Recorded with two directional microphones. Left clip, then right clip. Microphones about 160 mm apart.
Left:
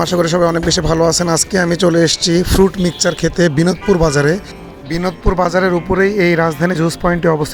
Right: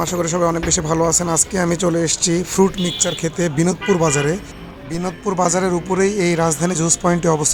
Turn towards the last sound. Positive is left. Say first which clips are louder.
# left 3 dB
turn(degrees=25)  # may be behind; listen again after turning